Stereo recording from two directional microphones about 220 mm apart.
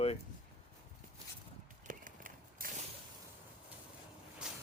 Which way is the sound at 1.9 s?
40° right (ahead or behind).